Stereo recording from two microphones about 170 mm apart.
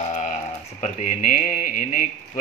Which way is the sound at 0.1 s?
45° left (ahead or behind).